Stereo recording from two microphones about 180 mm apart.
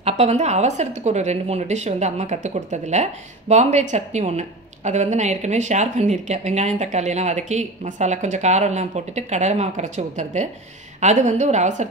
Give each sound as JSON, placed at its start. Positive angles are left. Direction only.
{"t": 0.2, "sound": "a woman's voice", "side_deg": -35}